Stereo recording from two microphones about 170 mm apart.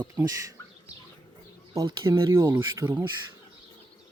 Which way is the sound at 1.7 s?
20° right (ahead or behind).